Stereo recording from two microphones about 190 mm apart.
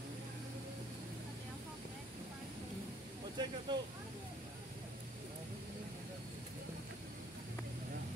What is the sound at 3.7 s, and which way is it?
Speech, 25° right (ahead or behind).